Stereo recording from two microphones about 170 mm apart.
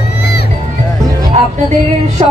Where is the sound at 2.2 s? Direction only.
30° right (ahead or behind).